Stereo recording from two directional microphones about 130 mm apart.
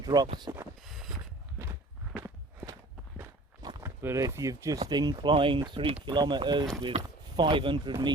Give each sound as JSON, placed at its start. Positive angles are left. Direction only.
{"t": 0.0, "sound": "speech", "side_deg": -30}
{"t": 0.8, "sound": "a sound", "side_deg": 0}
{"t": 2.1, "sound": "walk", "side_deg": -20}
{"t": 3.8, "sound": "speech", "side_deg": -20}